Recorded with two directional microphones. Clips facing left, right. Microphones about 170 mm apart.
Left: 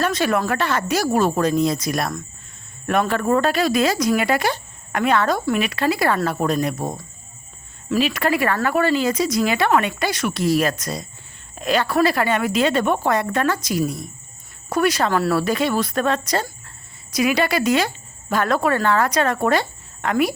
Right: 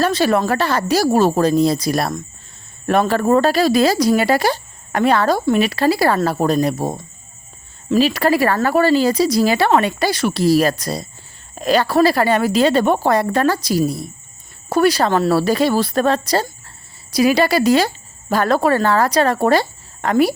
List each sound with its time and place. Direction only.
0.0 s speech: 30° right (ahead or behind)